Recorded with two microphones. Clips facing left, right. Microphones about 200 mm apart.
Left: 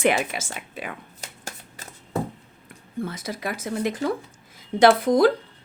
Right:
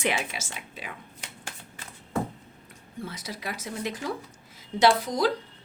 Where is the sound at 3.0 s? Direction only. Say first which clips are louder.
Left 4 dB; 50° left (ahead or behind).